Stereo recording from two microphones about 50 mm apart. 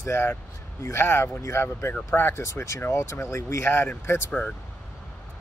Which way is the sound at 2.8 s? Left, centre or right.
Left.